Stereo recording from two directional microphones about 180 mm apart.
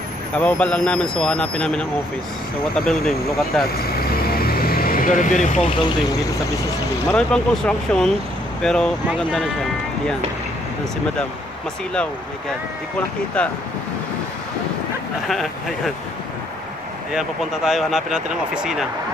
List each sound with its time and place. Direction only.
0.4 s speech: 5° left (ahead or behind)
4.0 s vehicle: 55° left (ahead or behind)
7.1 s speech: 5° left (ahead or behind)
13.4 s speech: 5° left (ahead or behind)
15.2 s speech: centre (ahead or behind)
17.1 s speech: centre (ahead or behind)